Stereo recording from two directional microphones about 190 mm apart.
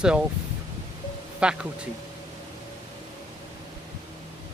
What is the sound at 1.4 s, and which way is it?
Speech, 5° right (ahead or behind).